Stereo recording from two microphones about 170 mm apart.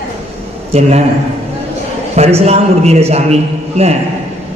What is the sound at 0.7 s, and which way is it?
Speech, 40° right (ahead or behind).